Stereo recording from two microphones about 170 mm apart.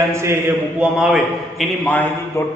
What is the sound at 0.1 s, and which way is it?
Speech, 15° right (ahead or behind).